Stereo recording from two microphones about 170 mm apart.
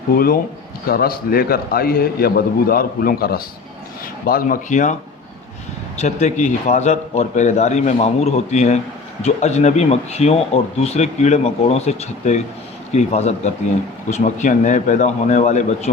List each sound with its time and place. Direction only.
0.9 s a man's voice: 60° left (ahead or behind)
6.0 s a man's voice: 40° left (ahead or behind)